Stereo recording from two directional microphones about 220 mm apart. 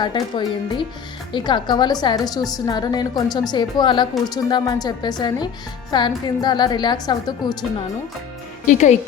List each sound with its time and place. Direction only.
0.0 s a woman's voice: 20° left (ahead or behind)
8.6 s speech: 35° left (ahead or behind)